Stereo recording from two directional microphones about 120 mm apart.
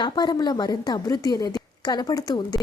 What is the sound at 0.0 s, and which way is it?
A woman's voice, 35° left (ahead or behind).